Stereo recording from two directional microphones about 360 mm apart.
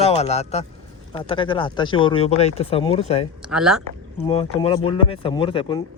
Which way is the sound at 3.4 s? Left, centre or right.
Centre.